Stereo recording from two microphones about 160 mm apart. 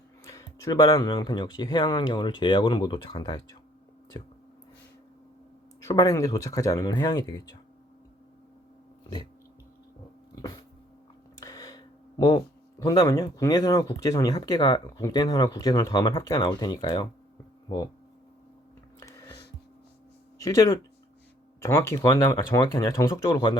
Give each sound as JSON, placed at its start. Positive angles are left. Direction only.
{"t": 0.3, "sound": "speech", "side_deg": 20}
{"t": 5.8, "sound": "speech", "side_deg": 20}
{"t": 10.3, "sound": "dog", "side_deg": 25}
{"t": 11.3, "sound": "a sound", "side_deg": 20}
{"t": 12.8, "sound": "speech", "side_deg": 25}
{"t": 18.9, "sound": "music", "side_deg": 20}
{"t": 20.4, "sound": "speech", "side_deg": 20}